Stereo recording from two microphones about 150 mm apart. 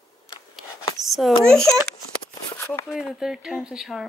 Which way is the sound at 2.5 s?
20° left (ahead or behind).